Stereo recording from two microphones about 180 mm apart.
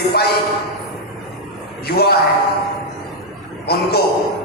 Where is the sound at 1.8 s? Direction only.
60° left (ahead or behind).